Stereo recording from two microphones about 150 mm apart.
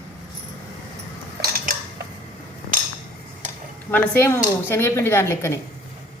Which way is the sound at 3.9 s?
15° left (ahead or behind).